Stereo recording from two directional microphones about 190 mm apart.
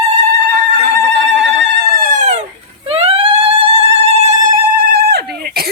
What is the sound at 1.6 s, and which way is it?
Emergency vehicle, 65° right (ahead or behind).